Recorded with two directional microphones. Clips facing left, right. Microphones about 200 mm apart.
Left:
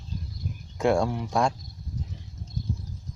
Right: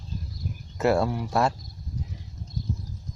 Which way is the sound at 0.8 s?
5° right (ahead or behind).